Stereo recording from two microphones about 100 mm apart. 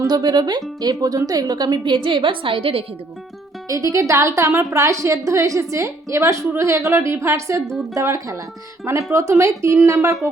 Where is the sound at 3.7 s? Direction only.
35° right (ahead or behind).